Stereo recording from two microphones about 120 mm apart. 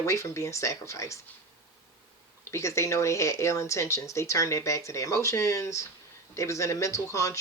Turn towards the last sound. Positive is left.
turn(degrees=25)  # may be behind; listen again after turning